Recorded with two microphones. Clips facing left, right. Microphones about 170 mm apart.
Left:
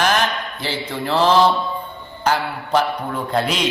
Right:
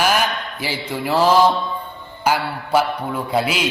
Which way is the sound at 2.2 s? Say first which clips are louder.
Even; 10° right (ahead or behind).